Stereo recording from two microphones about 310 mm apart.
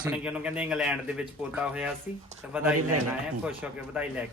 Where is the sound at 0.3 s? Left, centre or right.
Centre.